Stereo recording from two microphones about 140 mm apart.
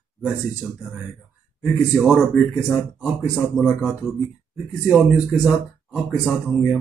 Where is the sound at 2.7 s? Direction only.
20° left (ahead or behind).